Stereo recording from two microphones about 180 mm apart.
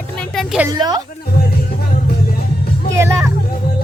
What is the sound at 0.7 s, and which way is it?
Music, 20° right (ahead or behind).